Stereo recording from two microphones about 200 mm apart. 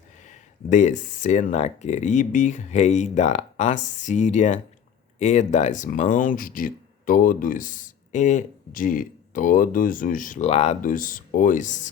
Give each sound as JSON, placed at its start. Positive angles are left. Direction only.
{"t": 0.7, "sound": "speech", "side_deg": 35}